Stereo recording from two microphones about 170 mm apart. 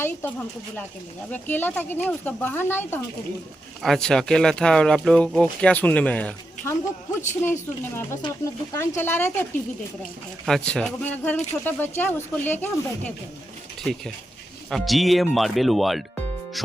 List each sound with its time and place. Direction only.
0.0 s speech: 10° left (ahead or behind)
3.8 s speech: 5° left (ahead or behind)
8.2 s speech: 20° left (ahead or behind)
14.7 s speech: centre (ahead or behind)